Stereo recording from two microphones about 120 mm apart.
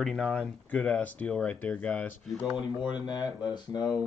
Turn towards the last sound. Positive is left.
turn(degrees=35)  # may be behind; listen again after turning